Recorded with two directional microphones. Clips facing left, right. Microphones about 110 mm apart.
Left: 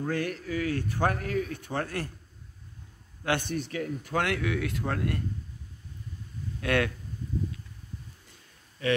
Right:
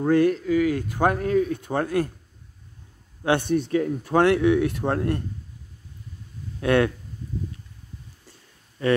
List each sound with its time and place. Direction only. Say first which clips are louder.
0.1 s speech: right 14 dB; 25° right (ahead or behind)
0.7 s speech: right 6 dB; 15° right (ahead or behind)
3.3 s speech: right 8 dB; 25° right (ahead or behind)
6.6 s speech: right 7 dB; 25° right (ahead or behind)